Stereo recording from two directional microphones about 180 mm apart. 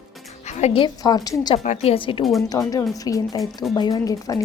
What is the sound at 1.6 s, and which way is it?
A woman's voice, 35° left (ahead or behind).